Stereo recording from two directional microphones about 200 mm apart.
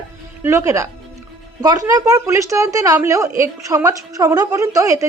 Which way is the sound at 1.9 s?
15° right (ahead or behind).